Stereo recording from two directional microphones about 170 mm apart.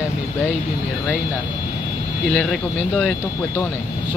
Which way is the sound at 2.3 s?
5° right (ahead or behind).